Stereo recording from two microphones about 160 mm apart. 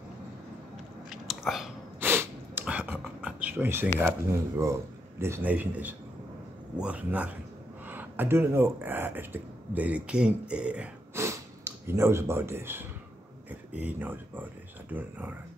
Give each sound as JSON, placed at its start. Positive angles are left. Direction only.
{"t": 1.1, "sound": "biting", "side_deg": 0}
{"t": 2.0, "sound": "a sound", "side_deg": -15}
{"t": 4.0, "sound": "speech", "side_deg": -15}